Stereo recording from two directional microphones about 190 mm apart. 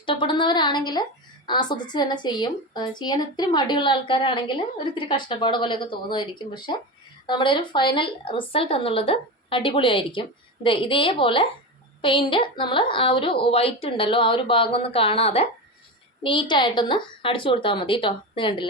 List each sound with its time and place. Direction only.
0.0 s a woman's voice: 25° left (ahead or behind)